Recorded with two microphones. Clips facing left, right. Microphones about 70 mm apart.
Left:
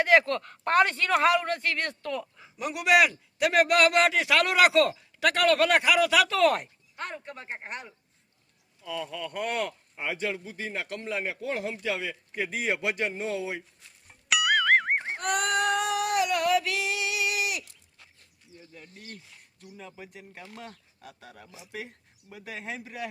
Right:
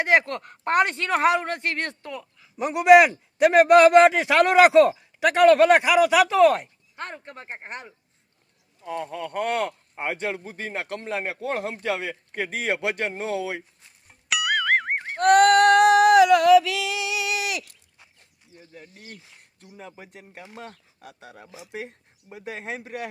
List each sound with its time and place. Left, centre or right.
0.0 s a man's voice: right
6.9 s speech: right
8.8 s speech: right
14.1 s music: centre
14.9 s a sound: centre
15.2 s female singing: right
17.4 s livestock: right
18.7 s a man's voice: right